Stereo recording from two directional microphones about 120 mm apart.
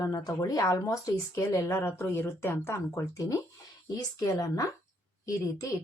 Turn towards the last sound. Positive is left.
turn(degrees=25)  # may be behind; listen again after turning